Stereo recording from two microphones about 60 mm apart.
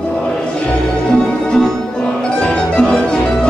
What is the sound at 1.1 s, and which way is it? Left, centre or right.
Music, centre.